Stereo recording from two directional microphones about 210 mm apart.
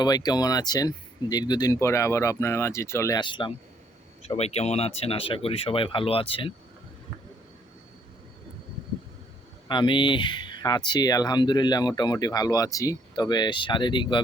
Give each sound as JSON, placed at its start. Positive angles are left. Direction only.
{"t": 0.0, "sound": "speech", "side_deg": 20}
{"t": 9.6, "sound": "speech", "side_deg": 20}